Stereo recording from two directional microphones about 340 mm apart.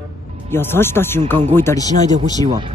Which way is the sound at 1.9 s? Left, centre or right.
Right.